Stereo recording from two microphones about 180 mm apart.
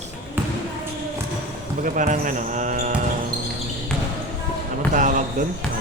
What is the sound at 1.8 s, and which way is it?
Speech, 45° right (ahead or behind).